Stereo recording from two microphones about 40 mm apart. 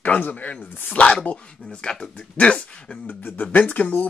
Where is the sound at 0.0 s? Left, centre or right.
Left.